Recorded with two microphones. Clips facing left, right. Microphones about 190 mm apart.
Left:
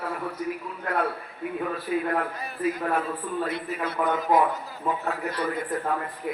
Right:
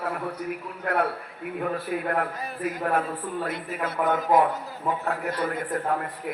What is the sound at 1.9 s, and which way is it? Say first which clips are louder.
Speech: left 3 dB; 55° right (ahead or behind).